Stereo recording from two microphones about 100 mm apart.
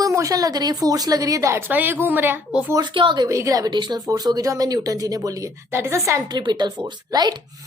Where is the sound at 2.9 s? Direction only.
55° right (ahead or behind).